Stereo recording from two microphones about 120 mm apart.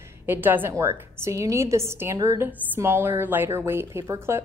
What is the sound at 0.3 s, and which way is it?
A woman's voice, 15° right (ahead or behind).